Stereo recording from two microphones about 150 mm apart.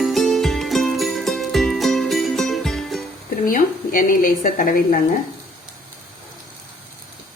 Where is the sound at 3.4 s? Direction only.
65° left (ahead or behind).